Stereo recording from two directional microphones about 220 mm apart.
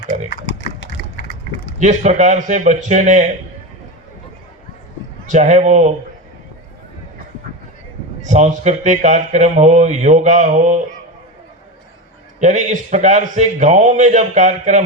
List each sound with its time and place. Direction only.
1.1 s a sound: 45° left (ahead or behind)
1.8 s speech: 35° right (ahead or behind)
5.2 s speech: 35° right (ahead or behind)
8.3 s speech: 35° right (ahead or behind)
12.4 s speech: 35° right (ahead or behind)